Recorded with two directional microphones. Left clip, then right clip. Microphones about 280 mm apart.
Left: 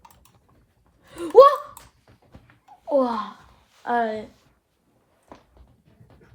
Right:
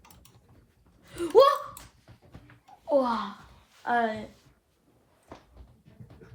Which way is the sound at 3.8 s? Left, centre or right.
Left.